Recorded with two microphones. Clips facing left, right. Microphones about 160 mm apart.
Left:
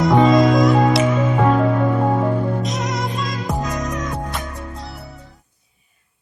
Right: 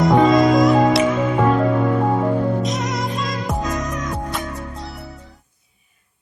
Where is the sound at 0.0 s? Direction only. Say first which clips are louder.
Even; centre (ahead or behind).